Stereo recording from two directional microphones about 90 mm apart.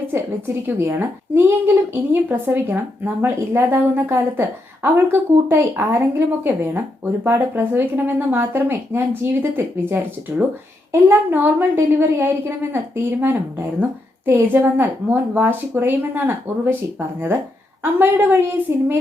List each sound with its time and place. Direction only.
0.1 s a woman's voice: 30° right (ahead or behind)
17.9 s a woman's voice: 20° right (ahead or behind)
18.7 s child singing: 30° right (ahead or behind)